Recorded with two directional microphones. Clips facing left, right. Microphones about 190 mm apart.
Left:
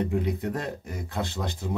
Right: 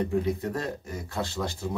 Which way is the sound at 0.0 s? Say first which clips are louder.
Even; 15° left (ahead or behind).